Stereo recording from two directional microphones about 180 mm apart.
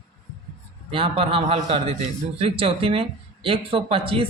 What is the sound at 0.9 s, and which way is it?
Speech, 30° right (ahead or behind).